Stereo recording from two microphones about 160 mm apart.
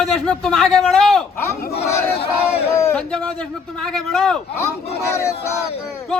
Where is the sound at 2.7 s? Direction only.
15° left (ahead or behind).